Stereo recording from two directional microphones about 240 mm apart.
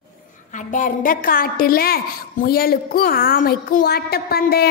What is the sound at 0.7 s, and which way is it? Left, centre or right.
A woman's voice, left.